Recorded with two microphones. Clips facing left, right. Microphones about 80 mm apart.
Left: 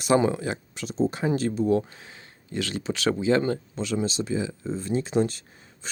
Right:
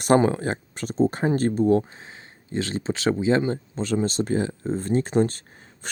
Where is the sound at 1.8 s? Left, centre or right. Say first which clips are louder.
Right 2 dB; right.